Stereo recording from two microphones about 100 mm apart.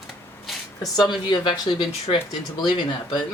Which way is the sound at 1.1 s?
55° left (ahead or behind).